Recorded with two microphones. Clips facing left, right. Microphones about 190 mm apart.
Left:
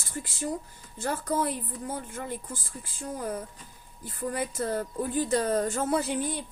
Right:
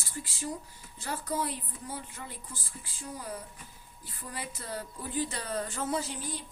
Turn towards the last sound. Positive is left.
turn(degrees=60)  # may be behind; listen again after turning